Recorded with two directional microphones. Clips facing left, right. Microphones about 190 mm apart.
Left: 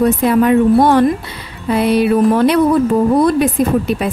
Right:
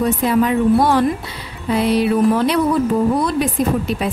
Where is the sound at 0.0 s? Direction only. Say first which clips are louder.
Left 4 dB; 60° left (ahead or behind).